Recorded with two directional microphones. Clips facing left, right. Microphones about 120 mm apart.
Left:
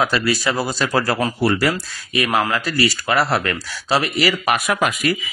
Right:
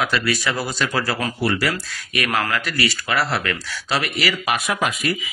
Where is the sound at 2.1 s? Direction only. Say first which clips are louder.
Left 4 dB; 20° left (ahead or behind).